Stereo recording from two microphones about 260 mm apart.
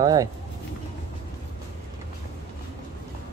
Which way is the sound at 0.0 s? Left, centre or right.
Centre.